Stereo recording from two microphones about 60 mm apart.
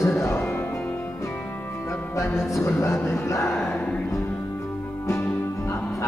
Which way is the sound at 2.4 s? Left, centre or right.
Left.